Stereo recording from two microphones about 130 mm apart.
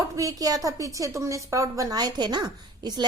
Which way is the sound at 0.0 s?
25° right (ahead or behind).